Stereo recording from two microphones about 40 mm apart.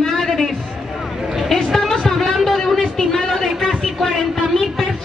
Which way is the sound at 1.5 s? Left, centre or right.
Centre.